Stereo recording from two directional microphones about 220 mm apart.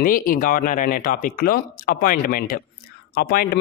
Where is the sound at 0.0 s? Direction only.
40° left (ahead or behind).